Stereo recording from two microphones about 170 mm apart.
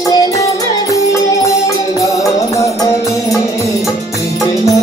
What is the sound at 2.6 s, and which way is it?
Music, 20° left (ahead or behind).